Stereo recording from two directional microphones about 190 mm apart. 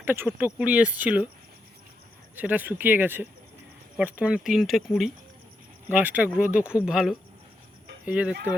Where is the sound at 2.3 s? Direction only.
10° right (ahead or behind).